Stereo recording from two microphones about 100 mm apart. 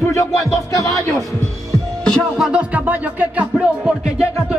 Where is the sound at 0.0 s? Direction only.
30° left (ahead or behind).